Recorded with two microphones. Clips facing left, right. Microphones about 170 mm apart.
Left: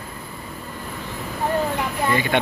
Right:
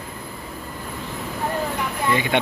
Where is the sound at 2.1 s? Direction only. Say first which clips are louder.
Even; 20° right (ahead or behind).